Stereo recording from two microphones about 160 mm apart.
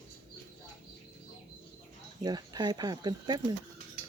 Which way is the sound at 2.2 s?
25° right (ahead or behind).